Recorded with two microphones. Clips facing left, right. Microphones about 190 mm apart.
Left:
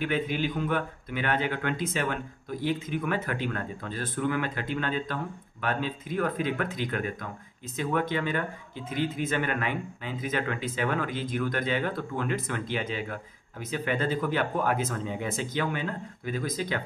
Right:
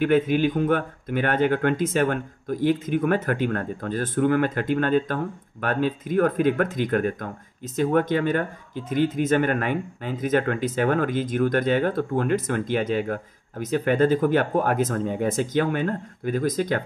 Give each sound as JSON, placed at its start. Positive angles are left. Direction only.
{"t": 0.0, "sound": "speech", "side_deg": -50}